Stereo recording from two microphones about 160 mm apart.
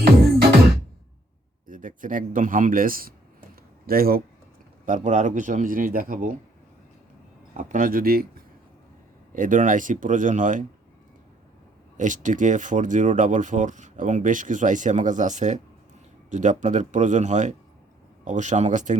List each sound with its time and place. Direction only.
0.0 s music: 75° right (ahead or behind)
1.6 s speech: 55° right (ahead or behind)
3.5 s a sound: 65° right (ahead or behind)
4.9 s a man's voice: 50° right (ahead or behind)
7.5 s a man's voice: 55° right (ahead or behind)
9.3 s a man's voice: 55° right (ahead or behind)
11.9 s speech: 50° right (ahead or behind)